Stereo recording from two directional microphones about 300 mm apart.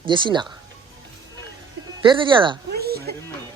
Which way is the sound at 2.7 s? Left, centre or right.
Right.